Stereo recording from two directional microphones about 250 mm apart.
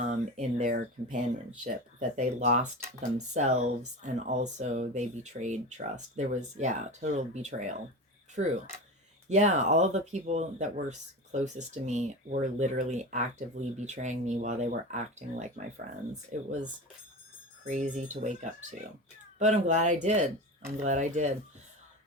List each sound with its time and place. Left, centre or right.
0.0 s speech: right
9.3 s speech: right
17.7 s speech: right